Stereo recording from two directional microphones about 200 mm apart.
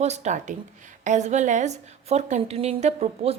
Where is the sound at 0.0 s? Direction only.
35° right (ahead or behind).